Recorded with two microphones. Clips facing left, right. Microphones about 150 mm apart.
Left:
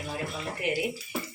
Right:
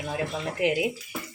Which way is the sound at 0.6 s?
90° right.